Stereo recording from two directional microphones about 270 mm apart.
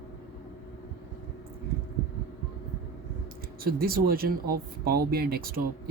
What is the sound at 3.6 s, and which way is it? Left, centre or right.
Speech, right.